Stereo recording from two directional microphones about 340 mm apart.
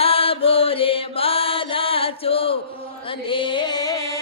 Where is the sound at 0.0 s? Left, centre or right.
Centre.